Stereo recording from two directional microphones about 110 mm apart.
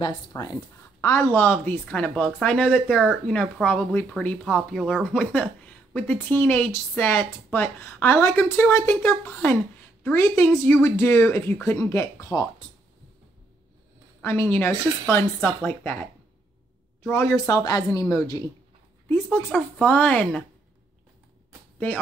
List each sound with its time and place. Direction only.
0.3 s a woman's voice: 30° left (ahead or behind)
14.2 s speech: 25° left (ahead or behind)
17.1 s speech: 25° left (ahead or behind)
19.5 s a woman's voice: 10° left (ahead or behind)
21.7 s speech: 15° left (ahead or behind)